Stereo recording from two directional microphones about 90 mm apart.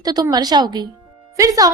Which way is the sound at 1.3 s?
40° right (ahead or behind).